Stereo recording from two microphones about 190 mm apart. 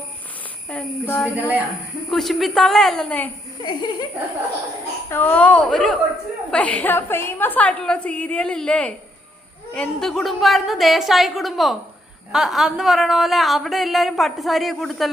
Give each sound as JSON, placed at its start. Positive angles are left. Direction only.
{"t": 0.7, "sound": "a woman's voice", "side_deg": 10}
{"t": 3.6, "sound": "laughter", "side_deg": 25}
{"t": 5.1, "sound": "a woman's voice", "side_deg": 10}